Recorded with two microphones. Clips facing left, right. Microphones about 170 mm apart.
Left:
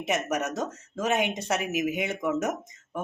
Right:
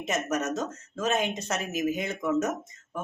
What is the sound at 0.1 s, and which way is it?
Speech, 15° left (ahead or behind).